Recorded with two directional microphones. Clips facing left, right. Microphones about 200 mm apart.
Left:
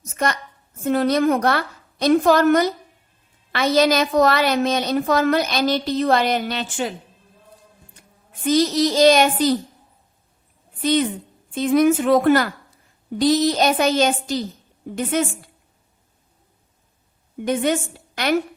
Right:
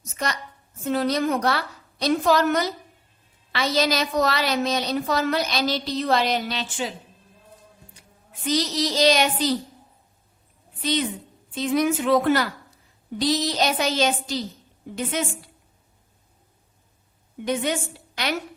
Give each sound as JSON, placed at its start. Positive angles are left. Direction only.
{"t": 0.1, "sound": "a woman's voice", "side_deg": 55}
{"t": 8.4, "sound": "a woman's voice", "side_deg": 50}
{"t": 11.5, "sound": "a woman's voice", "side_deg": 50}
{"t": 17.4, "sound": "a woman's voice", "side_deg": 50}